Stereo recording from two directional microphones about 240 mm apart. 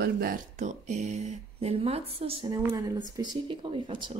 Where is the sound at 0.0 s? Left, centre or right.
Right.